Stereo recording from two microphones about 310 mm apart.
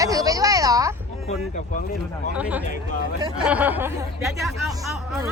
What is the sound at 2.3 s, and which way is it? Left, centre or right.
Speech, centre.